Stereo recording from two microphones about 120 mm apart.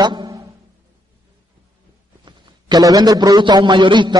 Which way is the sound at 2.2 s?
35° right (ahead or behind).